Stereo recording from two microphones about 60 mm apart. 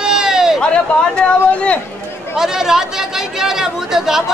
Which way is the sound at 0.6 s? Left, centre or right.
Centre.